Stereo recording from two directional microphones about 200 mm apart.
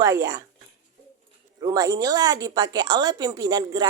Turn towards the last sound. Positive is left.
turn(degrees=-20)  # may be behind; listen again after turning